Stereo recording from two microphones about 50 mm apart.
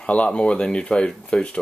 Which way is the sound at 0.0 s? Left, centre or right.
Left.